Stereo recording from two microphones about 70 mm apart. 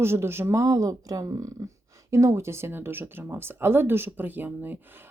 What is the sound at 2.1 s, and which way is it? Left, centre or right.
Speech, right.